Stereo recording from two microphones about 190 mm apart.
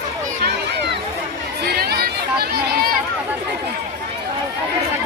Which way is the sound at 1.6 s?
55° right (ahead or behind).